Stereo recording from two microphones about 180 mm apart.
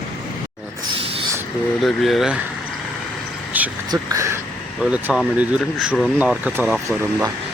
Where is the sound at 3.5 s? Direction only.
10° right (ahead or behind).